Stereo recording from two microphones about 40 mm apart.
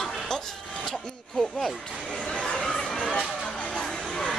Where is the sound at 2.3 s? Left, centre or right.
Left.